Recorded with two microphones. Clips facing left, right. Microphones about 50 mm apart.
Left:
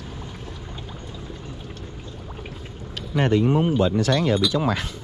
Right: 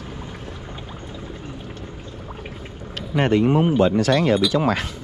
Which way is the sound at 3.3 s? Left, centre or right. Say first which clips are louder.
Right 3 dB; right.